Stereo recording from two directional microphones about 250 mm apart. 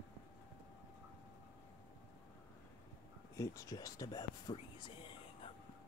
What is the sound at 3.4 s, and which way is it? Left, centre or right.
Speech, centre.